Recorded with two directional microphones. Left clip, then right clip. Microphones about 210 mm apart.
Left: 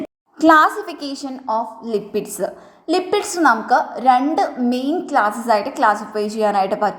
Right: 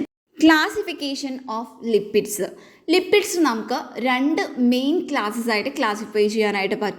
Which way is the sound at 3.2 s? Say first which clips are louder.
Left 3 dB; 50° right (ahead or behind).